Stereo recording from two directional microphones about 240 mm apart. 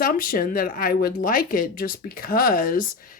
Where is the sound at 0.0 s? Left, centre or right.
Left.